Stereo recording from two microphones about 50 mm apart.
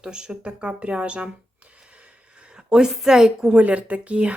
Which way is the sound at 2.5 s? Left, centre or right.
Centre.